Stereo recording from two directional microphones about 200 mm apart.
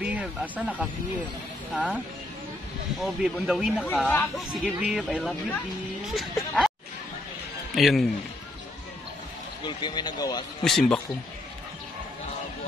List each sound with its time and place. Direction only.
0.0 s speech: 5° right (ahead or behind)
3.0 s speech: centre (ahead or behind)
4.6 s speech: 5° right (ahead or behind)
5.1 s speech: 5° left (ahead or behind)
7.7 s speech: centre (ahead or behind)
9.7 s speech: 20° left (ahead or behind)
10.6 s speech: 5° left (ahead or behind)